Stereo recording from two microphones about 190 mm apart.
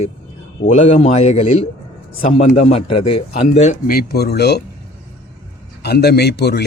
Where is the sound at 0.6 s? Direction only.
35° left (ahead or behind).